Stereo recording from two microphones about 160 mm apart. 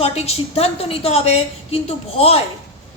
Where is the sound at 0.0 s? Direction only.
40° left (ahead or behind).